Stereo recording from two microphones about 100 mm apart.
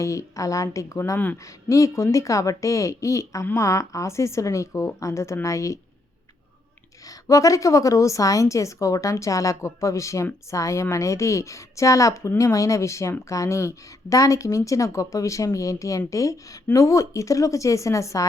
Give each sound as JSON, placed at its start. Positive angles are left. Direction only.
{"t": 0.0, "sound": "speech", "side_deg": 30}
{"t": 7.1, "sound": "speech", "side_deg": 35}